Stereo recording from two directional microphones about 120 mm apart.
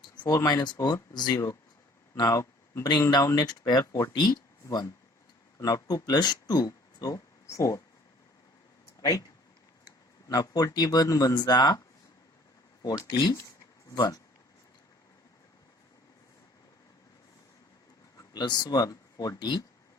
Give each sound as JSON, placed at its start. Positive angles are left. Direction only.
{"t": 0.3, "sound": "speech", "side_deg": 30}
{"t": 9.0, "sound": "a sound", "side_deg": 30}
{"t": 9.8, "sound": "speech", "side_deg": 30}
{"t": 12.8, "sound": "speech", "side_deg": 30}
{"t": 18.2, "sound": "speech", "side_deg": 35}